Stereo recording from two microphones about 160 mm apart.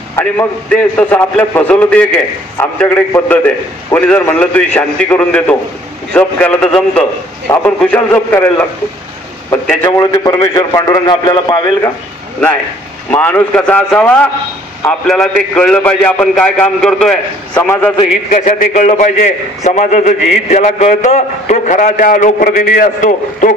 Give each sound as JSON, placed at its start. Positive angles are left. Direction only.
{"t": 0.1, "sound": "a man's voice", "side_deg": 10}
{"t": 3.1, "sound": "a man's voice", "side_deg": 10}
{"t": 13.1, "sound": "a man's voice", "side_deg": 10}
{"t": 18.3, "sound": "a man's voice", "side_deg": 60}